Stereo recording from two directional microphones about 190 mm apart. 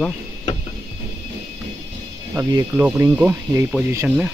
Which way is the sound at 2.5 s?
10° right (ahead or behind).